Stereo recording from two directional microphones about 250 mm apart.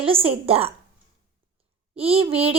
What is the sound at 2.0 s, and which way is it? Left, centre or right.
Speech, right.